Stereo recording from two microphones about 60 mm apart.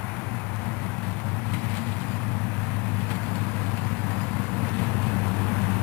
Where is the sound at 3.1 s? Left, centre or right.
Left.